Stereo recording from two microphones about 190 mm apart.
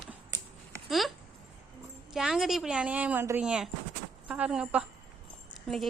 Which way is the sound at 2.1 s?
Centre (ahead or behind).